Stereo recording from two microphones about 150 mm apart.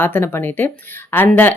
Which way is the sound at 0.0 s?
15° left (ahead or behind).